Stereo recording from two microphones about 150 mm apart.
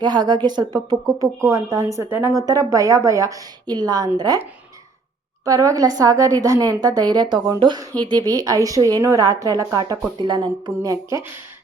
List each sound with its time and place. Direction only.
0.0 s speech: 30° right (ahead or behind)
5.5 s speech: 20° right (ahead or behind)
10.7 s speech: 20° right (ahead or behind)